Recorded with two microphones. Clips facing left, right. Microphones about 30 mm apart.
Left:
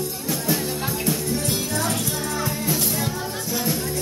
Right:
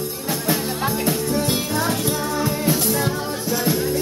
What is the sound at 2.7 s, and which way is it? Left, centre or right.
Music, centre.